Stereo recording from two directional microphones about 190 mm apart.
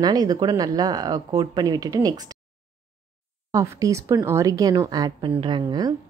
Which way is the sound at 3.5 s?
15° right (ahead or behind).